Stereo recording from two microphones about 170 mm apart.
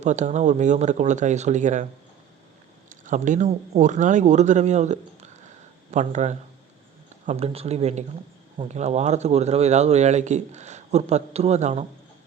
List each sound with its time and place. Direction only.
0.0 s speech: 45° right (ahead or behind)
2.9 s speech: 45° right (ahead or behind)